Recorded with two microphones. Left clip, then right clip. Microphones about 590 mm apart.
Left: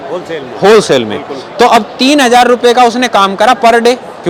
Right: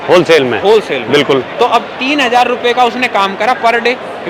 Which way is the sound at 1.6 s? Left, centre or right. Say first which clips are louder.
Left 4 dB; left.